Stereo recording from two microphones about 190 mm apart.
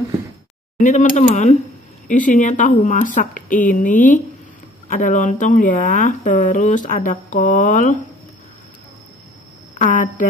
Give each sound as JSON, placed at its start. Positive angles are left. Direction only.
{"t": 0.7, "sound": "speech", "side_deg": 40}
{"t": 9.8, "sound": "speech", "side_deg": 45}